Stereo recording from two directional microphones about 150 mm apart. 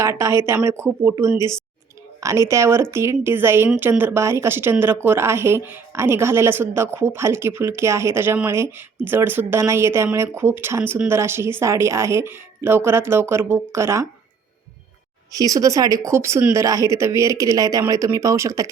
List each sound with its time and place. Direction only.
0.0 s a woman's voice: 20° right (ahead or behind)
15.3 s speech: 25° right (ahead or behind)